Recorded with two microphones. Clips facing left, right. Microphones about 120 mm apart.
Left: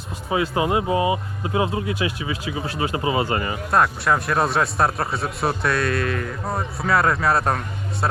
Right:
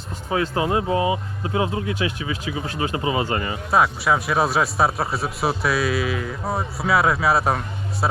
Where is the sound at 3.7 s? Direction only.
5° right (ahead or behind).